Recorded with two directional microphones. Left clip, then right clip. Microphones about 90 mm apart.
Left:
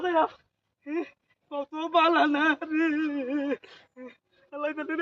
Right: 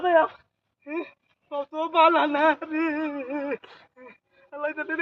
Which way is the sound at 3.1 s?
35° left (ahead or behind).